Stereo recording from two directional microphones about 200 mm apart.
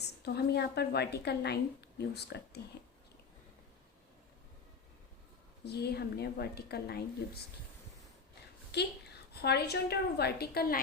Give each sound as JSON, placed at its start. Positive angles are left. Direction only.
{"t": 0.3, "sound": "a woman's voice", "side_deg": 55}
{"t": 5.6, "sound": "a woman's voice", "side_deg": 55}
{"t": 8.7, "sound": "a woman's voice", "side_deg": 55}